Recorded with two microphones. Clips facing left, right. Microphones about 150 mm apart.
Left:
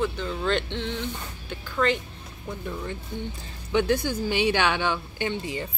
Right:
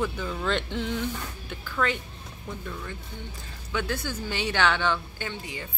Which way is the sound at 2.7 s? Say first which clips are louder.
Left 5 dB; 20° left (ahead or behind).